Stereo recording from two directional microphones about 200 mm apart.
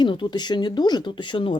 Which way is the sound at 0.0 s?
25° left (ahead or behind).